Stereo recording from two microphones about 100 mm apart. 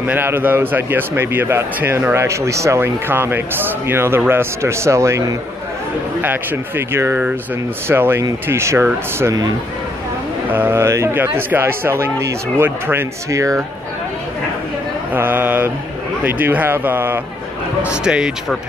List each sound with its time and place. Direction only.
0.0 s a man's voice: 20° right (ahead or behind)
6.2 s a man's voice: 20° right (ahead or behind)
9.2 s a man's voice: 35° right (ahead or behind)
10.5 s a man's voice: 20° right (ahead or behind)
15.1 s a man's voice: 20° right (ahead or behind)
17.8 s speech: 10° right (ahead or behind)